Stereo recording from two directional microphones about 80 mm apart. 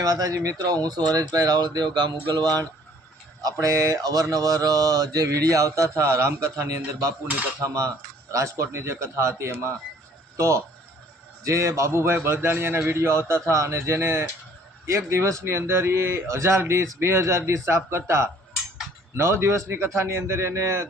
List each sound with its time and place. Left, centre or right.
0.0 s speech: right
3.4 s mantra: right
6.0 s speech: right